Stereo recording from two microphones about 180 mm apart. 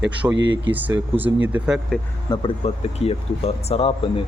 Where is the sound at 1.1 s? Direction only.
10° right (ahead or behind).